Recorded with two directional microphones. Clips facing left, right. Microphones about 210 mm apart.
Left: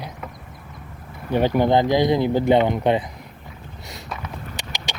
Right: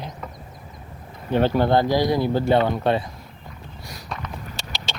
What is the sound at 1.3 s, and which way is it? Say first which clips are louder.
Speech: left 1 dB; 15° left (ahead or behind).